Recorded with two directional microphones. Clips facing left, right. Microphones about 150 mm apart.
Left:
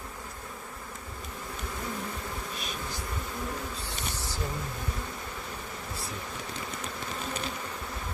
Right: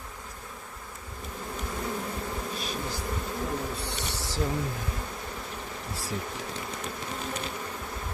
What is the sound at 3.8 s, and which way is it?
Insect, 90° right.